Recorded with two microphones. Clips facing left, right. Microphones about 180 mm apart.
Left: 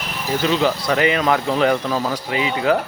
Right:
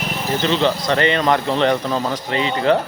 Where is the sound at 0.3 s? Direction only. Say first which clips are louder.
Even; 5° left (ahead or behind).